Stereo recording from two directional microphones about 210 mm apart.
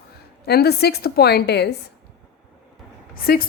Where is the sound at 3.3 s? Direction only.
45° left (ahead or behind).